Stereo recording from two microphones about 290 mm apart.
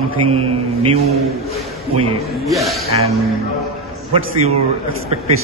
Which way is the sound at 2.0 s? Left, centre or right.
Centre.